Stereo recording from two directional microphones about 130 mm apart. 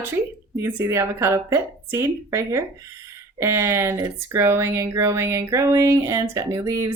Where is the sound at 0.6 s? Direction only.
20° right (ahead or behind).